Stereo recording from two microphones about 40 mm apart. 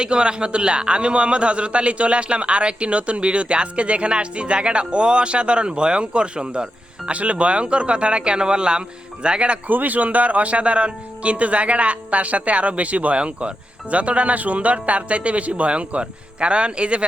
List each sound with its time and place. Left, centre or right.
0.0 s a man's voice: right
9.6 s speech: right